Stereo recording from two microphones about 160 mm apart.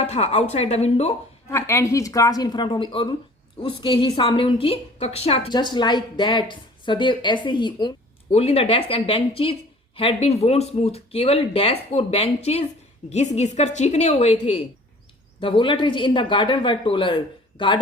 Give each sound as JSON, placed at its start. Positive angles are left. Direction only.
{"t": 0.0, "sound": "speech", "side_deg": 40}
{"t": 1.5, "sound": "a woman's voice", "side_deg": 15}
{"t": 8.3, "sound": "a woman's voice", "side_deg": 40}